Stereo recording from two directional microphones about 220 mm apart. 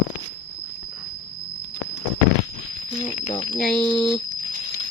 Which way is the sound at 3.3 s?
20° left (ahead or behind).